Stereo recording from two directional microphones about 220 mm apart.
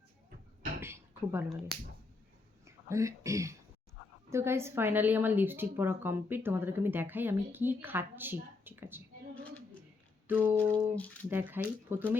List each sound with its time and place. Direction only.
0.8 s a sound: 10° right (ahead or behind)
1.5 s speech: centre (ahead or behind)
2.9 s a woman's voice: 15° right (ahead or behind)
10.2 s a woman's voice: 10° right (ahead or behind)
10.9 s speech: 5° left (ahead or behind)
11.3 s a woman's voice: 10° right (ahead or behind)